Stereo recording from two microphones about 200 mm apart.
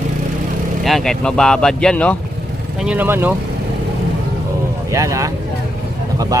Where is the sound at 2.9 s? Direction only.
10° right (ahead or behind).